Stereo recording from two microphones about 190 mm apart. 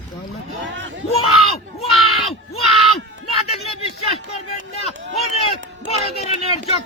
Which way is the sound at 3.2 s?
35° left (ahead or behind).